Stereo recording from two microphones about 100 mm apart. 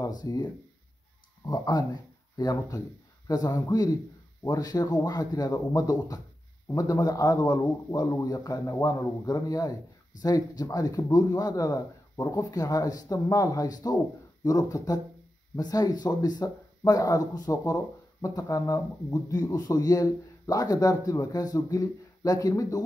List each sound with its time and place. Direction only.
0.0 s speech: 40° left (ahead or behind)